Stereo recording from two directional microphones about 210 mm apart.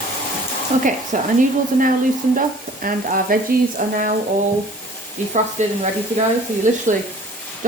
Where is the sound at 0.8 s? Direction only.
40° right (ahead or behind).